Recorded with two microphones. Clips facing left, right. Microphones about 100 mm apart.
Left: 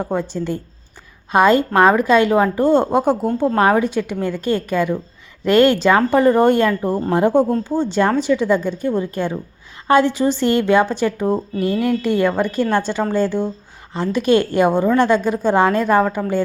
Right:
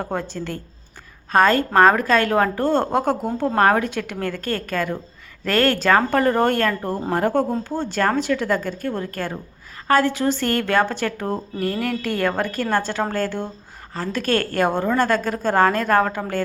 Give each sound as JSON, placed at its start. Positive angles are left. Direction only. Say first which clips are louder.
{"t": 0.0, "sound": "a woman's voice", "louder": "left 5 dB", "side_deg": 15}